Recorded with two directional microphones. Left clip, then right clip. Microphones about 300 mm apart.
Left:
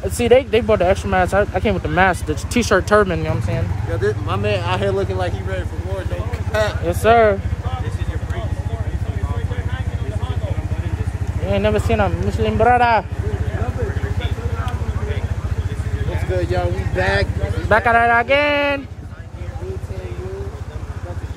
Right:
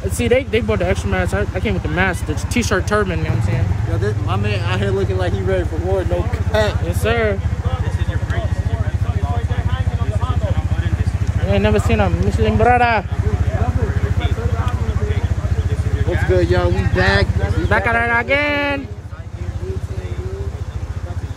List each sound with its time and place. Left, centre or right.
0.2 s speech: centre
5.5 s speech: centre
6.5 s speech: centre
6.9 s speech: centre
11.5 s speech: centre
16.1 s speech: right
17.6 s speech: centre